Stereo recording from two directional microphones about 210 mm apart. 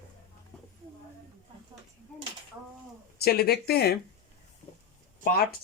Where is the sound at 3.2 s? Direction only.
50° left (ahead or behind).